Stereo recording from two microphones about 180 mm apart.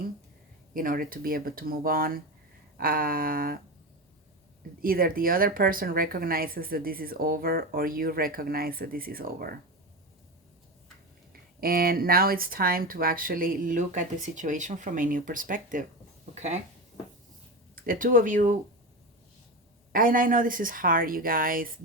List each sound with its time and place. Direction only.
0.7 s speech: 50° right (ahead or behind)
4.8 s speech: 55° right (ahead or behind)
11.3 s speech: 55° right (ahead or behind); by 16.6 s 40° right (ahead or behind)
17.7 s speech: 50° right (ahead or behind)
19.9 s speech: 50° right (ahead or behind)